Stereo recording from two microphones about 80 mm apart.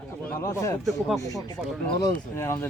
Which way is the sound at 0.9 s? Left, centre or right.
Centre.